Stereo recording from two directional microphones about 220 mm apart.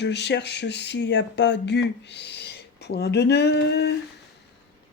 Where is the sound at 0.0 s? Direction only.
50° left (ahead or behind).